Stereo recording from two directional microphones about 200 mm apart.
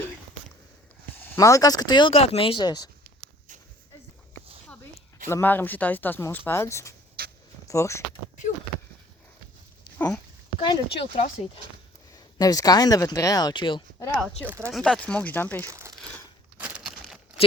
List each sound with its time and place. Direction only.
1.1 s speech: 10° left (ahead or behind)
5.3 s speech: 10° left (ahead or behind)
7.2 s a sound: 50° right (ahead or behind)
7.7 s speech: 15° left (ahead or behind)
10.6 s speech: 25° left (ahead or behind)
14.4 s speech: 10° right (ahead or behind)
14.7 s speech: centre (ahead or behind)
15.6 s crumpling: 15° right (ahead or behind)
16.6 s a sound: 5° right (ahead or behind)